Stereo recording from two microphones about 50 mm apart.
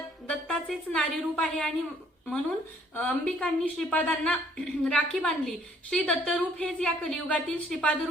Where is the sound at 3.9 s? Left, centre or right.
Left.